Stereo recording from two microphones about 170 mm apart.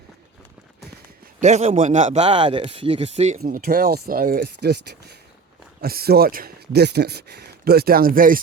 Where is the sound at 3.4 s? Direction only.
60° right (ahead or behind); by 5.1 s 80° right.